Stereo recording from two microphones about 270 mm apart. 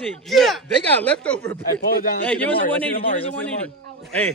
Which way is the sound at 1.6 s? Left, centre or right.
Left.